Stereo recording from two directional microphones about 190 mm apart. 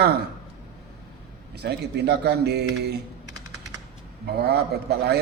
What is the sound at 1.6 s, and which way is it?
A man's voice, 60° right (ahead or behind).